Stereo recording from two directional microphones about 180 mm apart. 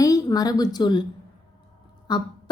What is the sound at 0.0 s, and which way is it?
Speech, 20° left (ahead or behind).